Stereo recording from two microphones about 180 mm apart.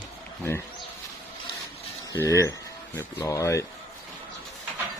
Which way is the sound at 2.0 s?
15° left (ahead or behind).